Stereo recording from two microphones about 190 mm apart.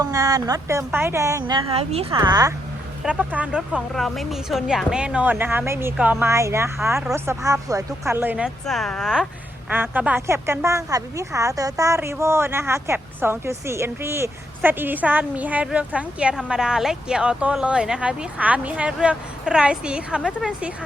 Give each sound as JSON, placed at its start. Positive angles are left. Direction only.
{"t": 0.0, "sound": "speech", "side_deg": -20}
{"t": 2.1, "sound": "speech", "side_deg": -20}
{"t": 3.0, "sound": "a woman's voice", "side_deg": -5}